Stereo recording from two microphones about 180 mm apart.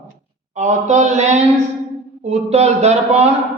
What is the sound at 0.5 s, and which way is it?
A woman's voice, 40° right (ahead or behind).